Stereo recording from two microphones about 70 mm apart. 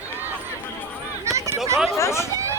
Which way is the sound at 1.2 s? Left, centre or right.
Right.